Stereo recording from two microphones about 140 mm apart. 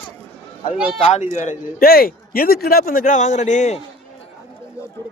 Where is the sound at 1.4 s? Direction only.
75° left (ahead or behind); by 3.8 s 60° left (ahead or behind).